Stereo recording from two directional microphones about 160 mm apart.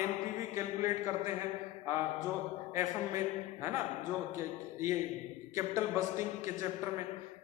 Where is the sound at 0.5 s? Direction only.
20° right (ahead or behind).